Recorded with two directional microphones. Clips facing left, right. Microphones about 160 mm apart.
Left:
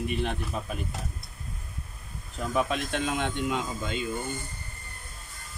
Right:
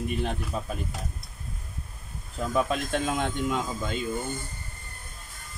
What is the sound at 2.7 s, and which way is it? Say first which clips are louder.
Speech: right 2 dB; 45° right (ahead or behind).